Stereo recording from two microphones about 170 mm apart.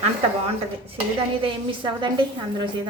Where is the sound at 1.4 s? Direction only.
30° right (ahead or behind).